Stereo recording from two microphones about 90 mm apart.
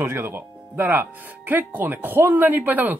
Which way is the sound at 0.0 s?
25° right (ahead or behind).